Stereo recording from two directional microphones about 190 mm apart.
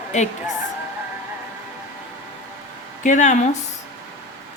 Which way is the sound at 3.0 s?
40° left (ahead or behind).